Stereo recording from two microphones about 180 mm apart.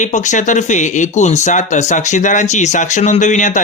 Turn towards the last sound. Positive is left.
turn(degrees=45)  # may be behind; listen again after turning